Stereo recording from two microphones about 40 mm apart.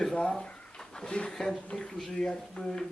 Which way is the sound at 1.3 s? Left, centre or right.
Centre.